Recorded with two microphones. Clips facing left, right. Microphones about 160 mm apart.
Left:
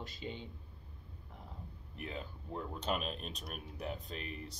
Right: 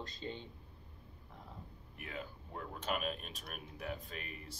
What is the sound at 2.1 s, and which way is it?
Speech, 30° left (ahead or behind).